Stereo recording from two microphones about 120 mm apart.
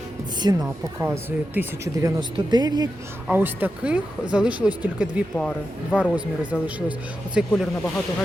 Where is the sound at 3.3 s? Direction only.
15° right (ahead or behind).